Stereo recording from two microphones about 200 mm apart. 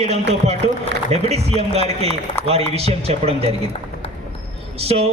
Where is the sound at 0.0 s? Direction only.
30° right (ahead or behind).